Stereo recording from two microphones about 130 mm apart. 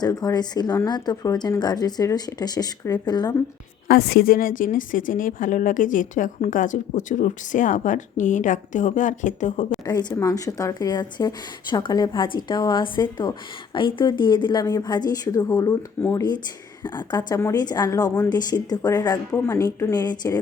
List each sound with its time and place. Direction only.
0.0 s a woman's voice: 30° left (ahead or behind)
4.3 s a woman's voice: 90° left; by 9.7 s 70° left (ahead or behind)
9.8 s a woman's voice: 35° left (ahead or behind)
16.8 s a woman's voice: 35° left (ahead or behind)